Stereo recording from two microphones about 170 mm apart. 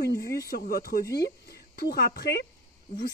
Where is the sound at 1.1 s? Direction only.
70° left (ahead or behind).